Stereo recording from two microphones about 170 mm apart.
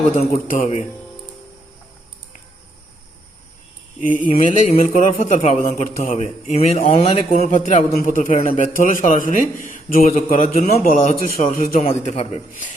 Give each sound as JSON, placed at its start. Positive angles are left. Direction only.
{"t": 0.2, "sound": "a man's voice", "side_deg": 45}
{"t": 4.4, "sound": "a man's voice", "side_deg": 45}
{"t": 4.9, "sound": "a man's voice", "side_deg": 50}